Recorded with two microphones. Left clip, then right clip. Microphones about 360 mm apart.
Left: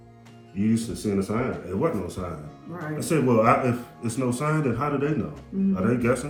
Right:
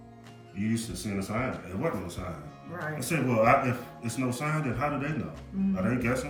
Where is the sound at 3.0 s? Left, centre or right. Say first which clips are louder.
Left 5 dB; centre.